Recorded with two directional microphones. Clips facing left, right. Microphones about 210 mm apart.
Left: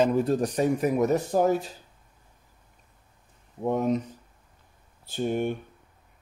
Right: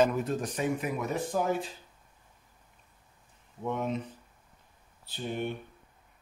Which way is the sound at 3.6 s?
40° left (ahead or behind).